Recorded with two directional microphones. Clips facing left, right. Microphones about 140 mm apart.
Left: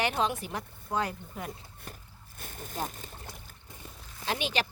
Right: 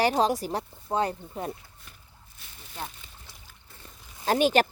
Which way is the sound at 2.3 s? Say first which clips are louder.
Left 5 dB; 50° left (ahead or behind).